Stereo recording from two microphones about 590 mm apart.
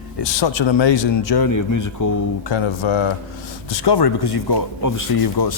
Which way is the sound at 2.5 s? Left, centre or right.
Left.